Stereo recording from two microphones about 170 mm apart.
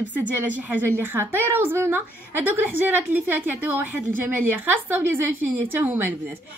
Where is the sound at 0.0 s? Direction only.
10° right (ahead or behind).